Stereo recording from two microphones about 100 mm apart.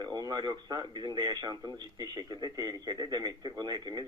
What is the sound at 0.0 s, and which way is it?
A man's voice, 45° right (ahead or behind).